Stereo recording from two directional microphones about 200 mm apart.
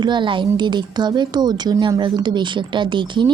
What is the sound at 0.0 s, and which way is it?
Speech, 25° right (ahead or behind).